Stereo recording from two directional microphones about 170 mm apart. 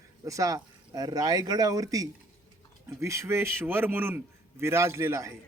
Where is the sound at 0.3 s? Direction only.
20° right (ahead or behind).